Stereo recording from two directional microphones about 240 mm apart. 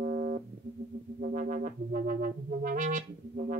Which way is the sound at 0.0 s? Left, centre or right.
Right.